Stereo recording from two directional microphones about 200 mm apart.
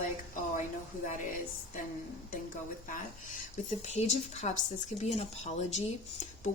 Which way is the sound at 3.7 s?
35° left (ahead or behind).